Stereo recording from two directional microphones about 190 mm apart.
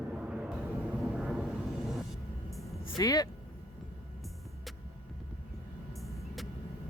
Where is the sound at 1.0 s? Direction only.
Centre (ahead or behind).